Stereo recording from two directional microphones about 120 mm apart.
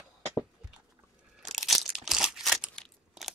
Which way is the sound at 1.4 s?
Centre (ahead or behind).